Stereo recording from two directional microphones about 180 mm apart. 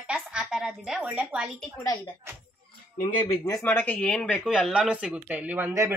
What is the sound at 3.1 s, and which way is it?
Speech, 30° left (ahead or behind).